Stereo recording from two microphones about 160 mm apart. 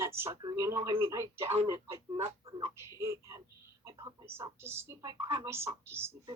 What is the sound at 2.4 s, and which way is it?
Speech, 35° right (ahead or behind).